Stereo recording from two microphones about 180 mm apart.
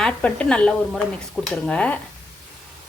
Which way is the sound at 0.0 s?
5° left (ahead or behind).